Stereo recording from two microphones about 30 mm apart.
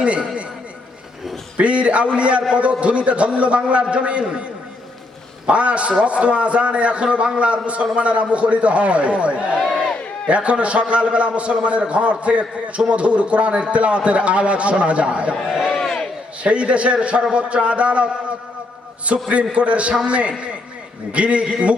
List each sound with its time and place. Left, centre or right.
0.0 s a man's voice: right
1.5 s a man's voice: right
5.5 s a man's voice: right
15.4 s a sound: right
15.8 s slam: centre
16.4 s a man's voice: right
19.3 s a man's voice: right